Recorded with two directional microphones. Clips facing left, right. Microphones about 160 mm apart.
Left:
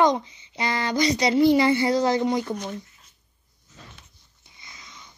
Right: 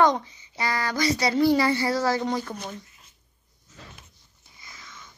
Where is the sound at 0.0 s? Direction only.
20° left (ahead or behind).